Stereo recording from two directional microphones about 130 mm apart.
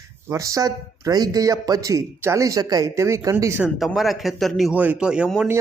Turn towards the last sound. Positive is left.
turn(degrees=-5)  # may be behind; listen again after turning